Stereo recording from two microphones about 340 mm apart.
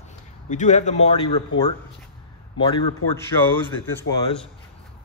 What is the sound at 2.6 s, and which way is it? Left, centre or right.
Speech, centre.